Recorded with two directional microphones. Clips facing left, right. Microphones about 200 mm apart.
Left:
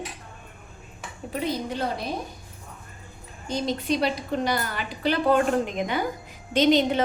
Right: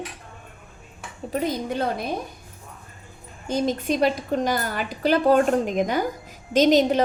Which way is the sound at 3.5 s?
50° right (ahead or behind).